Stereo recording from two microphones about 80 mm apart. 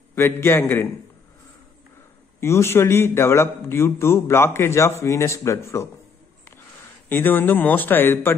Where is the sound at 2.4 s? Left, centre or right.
Left.